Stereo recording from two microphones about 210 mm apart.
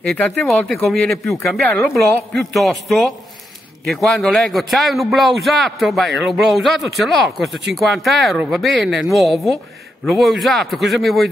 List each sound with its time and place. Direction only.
0.0 s a man's voice: centre (ahead or behind)